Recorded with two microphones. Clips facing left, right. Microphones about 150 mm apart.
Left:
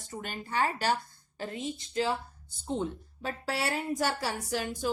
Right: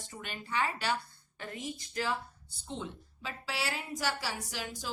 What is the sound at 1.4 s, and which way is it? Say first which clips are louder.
Speech: left 5 dB; 30° left (ahead or behind).